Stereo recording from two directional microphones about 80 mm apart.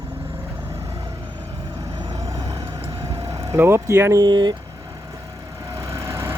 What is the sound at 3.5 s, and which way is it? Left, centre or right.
Speech, right.